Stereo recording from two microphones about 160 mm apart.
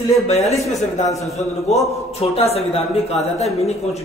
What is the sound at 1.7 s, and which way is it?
Speech, 45° left (ahead or behind).